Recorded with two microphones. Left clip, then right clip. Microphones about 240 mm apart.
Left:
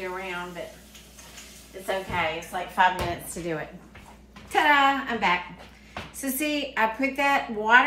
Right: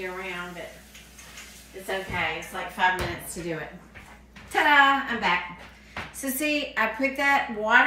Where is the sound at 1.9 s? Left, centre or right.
Centre.